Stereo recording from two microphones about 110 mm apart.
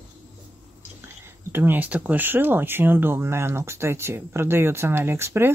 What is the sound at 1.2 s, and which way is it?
Speech, 20° right (ahead or behind).